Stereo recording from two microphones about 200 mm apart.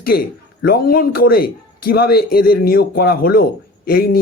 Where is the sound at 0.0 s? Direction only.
50° left (ahead or behind).